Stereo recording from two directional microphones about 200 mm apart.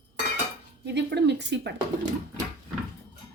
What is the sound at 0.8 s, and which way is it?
Speech, 60° right (ahead or behind).